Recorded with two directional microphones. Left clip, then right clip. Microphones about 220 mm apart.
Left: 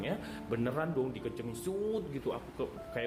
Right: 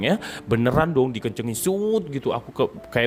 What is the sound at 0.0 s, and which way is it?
Speech, 50° right (ahead or behind).